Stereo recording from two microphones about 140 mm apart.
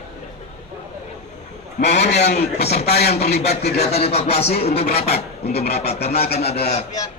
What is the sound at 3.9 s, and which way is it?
Speech, 45° left (ahead or behind).